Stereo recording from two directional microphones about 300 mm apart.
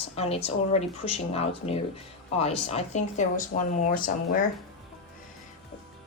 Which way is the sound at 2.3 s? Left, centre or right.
Left.